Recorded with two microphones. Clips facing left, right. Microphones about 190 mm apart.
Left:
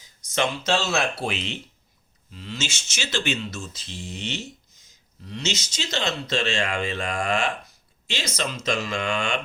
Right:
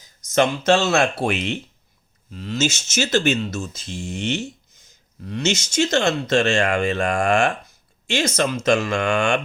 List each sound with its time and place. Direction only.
0.3 s speech: 50° right (ahead or behind)